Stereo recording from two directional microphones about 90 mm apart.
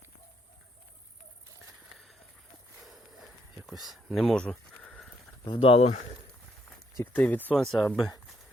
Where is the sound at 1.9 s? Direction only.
Centre (ahead or behind).